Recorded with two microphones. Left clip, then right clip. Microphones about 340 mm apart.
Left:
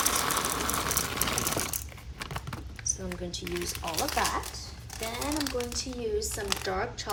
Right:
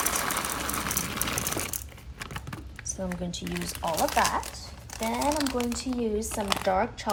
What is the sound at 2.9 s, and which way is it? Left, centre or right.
Speech, centre.